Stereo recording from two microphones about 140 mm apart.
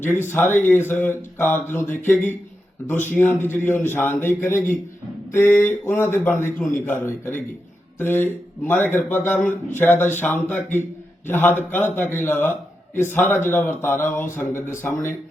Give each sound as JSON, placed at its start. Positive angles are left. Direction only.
{"t": 0.0, "sound": "a man's voice", "side_deg": 15}